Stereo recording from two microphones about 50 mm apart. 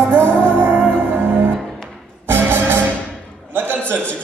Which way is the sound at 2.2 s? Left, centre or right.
Right.